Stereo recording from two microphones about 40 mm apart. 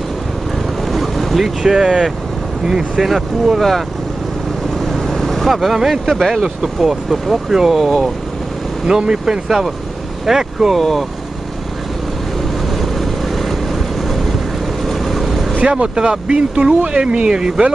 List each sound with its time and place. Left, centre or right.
0.9 s boat: centre
1.7 s speech: centre
4.8 s vehicle: centre
6.4 s speech: centre
8.8 s speech: centre
10.8 s speech: centre
12.6 s vehicle: centre
14.9 s vehicle: centre
15.5 s speech: right